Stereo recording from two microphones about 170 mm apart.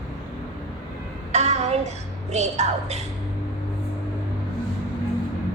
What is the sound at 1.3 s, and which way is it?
Child singing, 40° right (ahead or behind).